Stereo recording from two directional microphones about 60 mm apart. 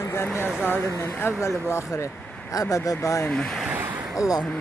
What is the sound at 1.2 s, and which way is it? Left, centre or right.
Speech, left.